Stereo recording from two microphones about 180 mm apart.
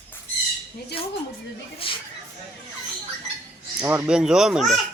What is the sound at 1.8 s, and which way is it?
Speech, 30° left (ahead or behind).